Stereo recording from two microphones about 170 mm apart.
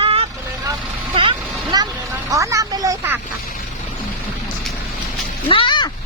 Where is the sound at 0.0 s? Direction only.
35° right (ahead or behind).